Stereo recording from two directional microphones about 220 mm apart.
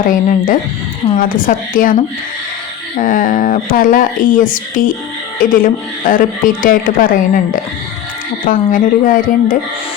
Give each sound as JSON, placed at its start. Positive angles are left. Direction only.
{"t": 0.1, "sound": "a woman's voice", "side_deg": 40}
{"t": 3.0, "sound": "a woman's voice", "side_deg": 40}